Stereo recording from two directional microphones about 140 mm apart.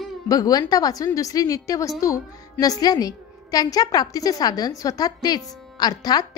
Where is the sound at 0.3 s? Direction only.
25° left (ahead or behind).